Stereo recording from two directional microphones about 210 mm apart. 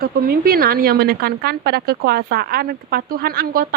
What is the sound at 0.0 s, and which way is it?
A woman's voice, 45° right (ahead or behind).